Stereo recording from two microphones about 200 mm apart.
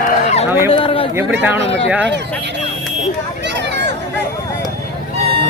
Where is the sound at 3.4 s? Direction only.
60° right (ahead or behind).